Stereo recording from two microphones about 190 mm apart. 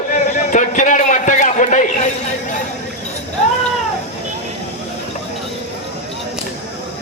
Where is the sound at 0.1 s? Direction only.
40° left (ahead or behind).